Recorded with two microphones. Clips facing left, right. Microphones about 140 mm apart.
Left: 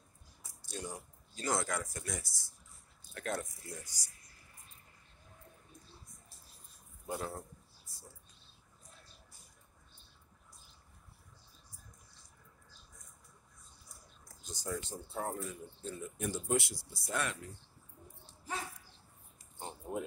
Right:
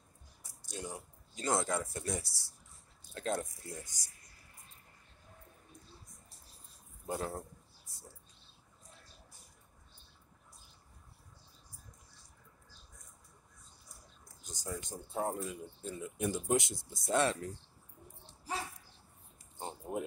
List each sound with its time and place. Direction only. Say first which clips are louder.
0.7 s speech: even; 20° right (ahead or behind)
3.2 s speech: right 3 dB; 20° right (ahead or behind)
7.1 s speech: right 2 dB; 30° right (ahead or behind)
14.4 s a sound: left 2 dB; 15° right (ahead or behind)
14.8 s speech: right 3 dB; 15° right (ahead or behind)
19.6 s typing: right 1 dB; 20° right (ahead or behind)